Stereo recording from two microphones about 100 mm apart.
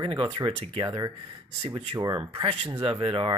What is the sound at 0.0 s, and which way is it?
Speech, 55° right (ahead or behind).